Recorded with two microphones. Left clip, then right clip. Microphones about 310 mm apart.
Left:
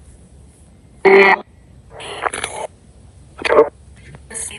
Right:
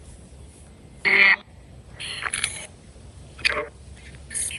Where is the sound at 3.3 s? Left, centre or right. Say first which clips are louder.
Left 12 dB; centre.